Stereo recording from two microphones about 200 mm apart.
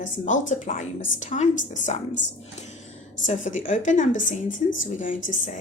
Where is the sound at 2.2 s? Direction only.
65° left (ahead or behind).